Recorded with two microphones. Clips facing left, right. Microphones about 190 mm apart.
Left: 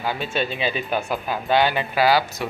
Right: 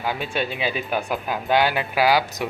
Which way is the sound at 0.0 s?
15° right (ahead or behind).